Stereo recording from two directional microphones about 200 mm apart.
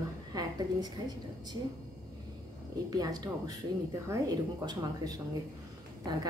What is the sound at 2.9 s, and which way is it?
Speech, 20° right (ahead or behind).